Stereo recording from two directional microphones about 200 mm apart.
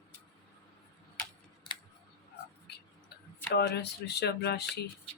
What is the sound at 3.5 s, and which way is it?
Speech, 55° left (ahead or behind).